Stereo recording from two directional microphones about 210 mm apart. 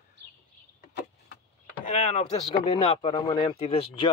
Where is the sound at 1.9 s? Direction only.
35° left (ahead or behind).